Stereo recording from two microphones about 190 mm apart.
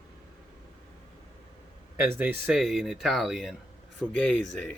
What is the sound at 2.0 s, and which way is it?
Speech, 10° right (ahead or behind).